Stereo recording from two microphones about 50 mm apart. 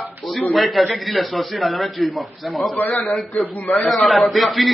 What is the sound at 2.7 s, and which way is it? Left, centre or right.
Speech, left.